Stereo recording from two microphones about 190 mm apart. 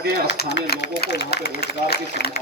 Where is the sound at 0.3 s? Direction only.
65° left (ahead or behind).